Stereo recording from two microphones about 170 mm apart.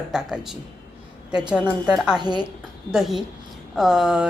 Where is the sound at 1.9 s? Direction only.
5° right (ahead or behind).